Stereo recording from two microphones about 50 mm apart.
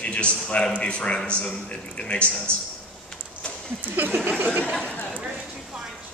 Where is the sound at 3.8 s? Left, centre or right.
Right.